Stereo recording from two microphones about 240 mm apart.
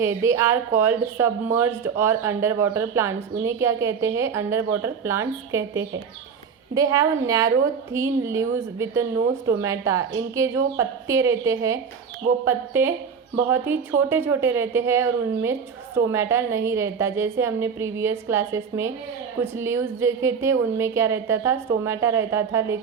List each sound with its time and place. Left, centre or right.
0.0 s speech: centre